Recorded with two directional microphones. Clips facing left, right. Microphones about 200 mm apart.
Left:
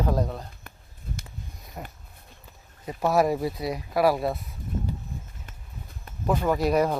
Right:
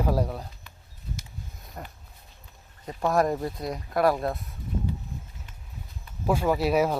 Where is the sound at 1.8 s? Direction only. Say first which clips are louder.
Left 2 dB; 5° left (ahead or behind).